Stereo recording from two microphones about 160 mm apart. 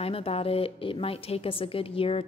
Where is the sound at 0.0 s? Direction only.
35° left (ahead or behind).